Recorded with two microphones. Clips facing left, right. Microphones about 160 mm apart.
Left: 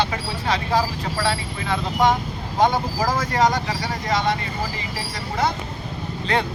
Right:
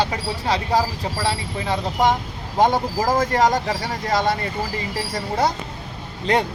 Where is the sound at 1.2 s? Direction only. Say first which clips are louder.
Right 1 dB; 35° right (ahead or behind).